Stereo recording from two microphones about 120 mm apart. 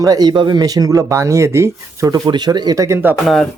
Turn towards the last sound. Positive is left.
turn(degrees=0)  # may be behind; listen again after turning